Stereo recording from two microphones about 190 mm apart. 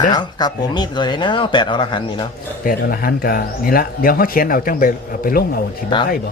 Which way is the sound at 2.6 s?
50° left (ahead or behind).